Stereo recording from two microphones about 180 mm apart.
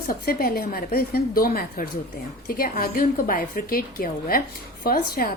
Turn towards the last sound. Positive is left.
turn(degrees=55)  # may be behind; listen again after turning